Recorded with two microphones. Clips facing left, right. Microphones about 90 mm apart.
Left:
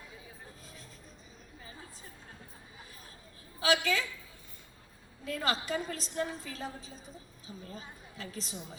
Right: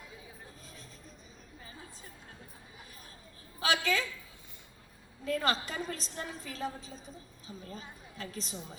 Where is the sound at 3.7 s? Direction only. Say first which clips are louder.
Left 1 dB; 20° left (ahead or behind).